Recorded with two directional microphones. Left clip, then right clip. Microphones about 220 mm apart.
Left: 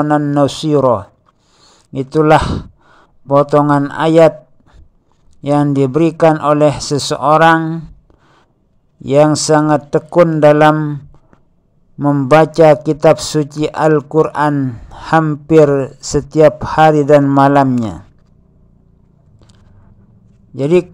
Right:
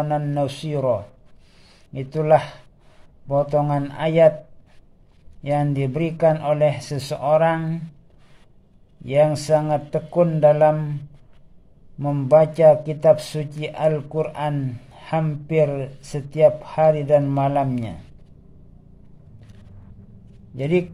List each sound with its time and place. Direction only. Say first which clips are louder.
0.1 s a man's voice: left 10 dB; 30° left (ahead or behind)
5.4 s a man's voice: left 10 dB; 30° left (ahead or behind)
9.0 s a man's voice: left 8 dB; 30° left (ahead or behind)
12.0 s a man's voice: left 6 dB; 30° left (ahead or behind)
20.5 s a man's voice: left 9 dB; 25° left (ahead or behind)